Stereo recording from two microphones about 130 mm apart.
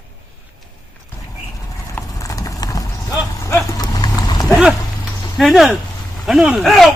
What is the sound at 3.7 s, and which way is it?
Vehicle, 30° left (ahead or behind).